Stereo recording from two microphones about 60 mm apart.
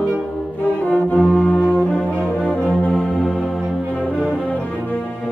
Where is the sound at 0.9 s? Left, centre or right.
Left.